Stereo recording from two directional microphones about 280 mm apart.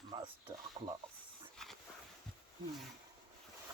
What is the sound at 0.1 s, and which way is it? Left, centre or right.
Mechanisms, centre.